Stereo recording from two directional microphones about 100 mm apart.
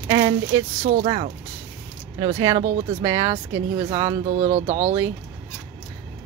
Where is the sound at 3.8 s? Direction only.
40° right (ahead or behind).